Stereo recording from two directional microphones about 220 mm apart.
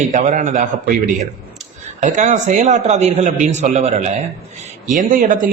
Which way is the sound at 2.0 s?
30° right (ahead or behind).